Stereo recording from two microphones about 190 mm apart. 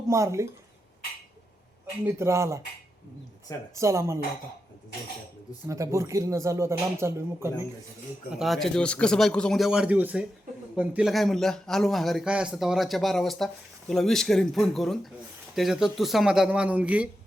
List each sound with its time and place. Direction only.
0.1 s speech: 15° right (ahead or behind)
2.0 s speech: 15° right (ahead or behind)
3.8 s speech: 15° right (ahead or behind)
5.6 s speech: 15° right (ahead or behind)
8.4 s a man's voice: centre (ahead or behind)